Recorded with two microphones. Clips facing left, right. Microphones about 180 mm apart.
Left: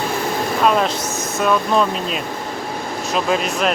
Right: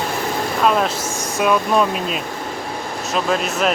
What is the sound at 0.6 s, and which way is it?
Speech, centre (ahead or behind).